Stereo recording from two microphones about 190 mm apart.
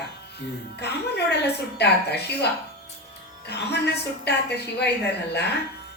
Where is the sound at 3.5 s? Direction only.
60° left (ahead or behind).